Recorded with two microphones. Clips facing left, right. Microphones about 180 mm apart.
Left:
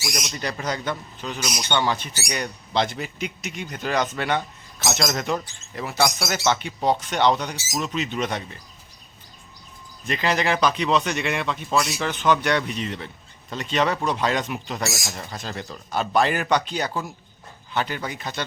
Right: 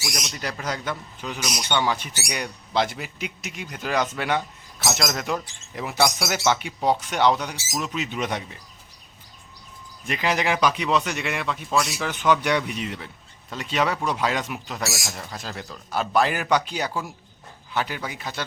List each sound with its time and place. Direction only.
0.0 s a man's voice: 5° left (ahead or behind)
1.5 s speech: centre (ahead or behind)
1.7 s a man's voice: 10° right (ahead or behind)
10.1 s a man's voice: 10° right (ahead or behind)